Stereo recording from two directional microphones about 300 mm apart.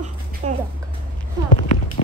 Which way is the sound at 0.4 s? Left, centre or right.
Right.